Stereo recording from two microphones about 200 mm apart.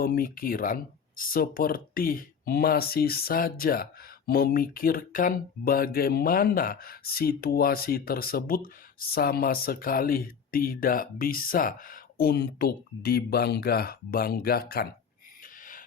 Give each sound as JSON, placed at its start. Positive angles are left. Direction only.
{"t": 0.0, "sound": "speech", "side_deg": 45}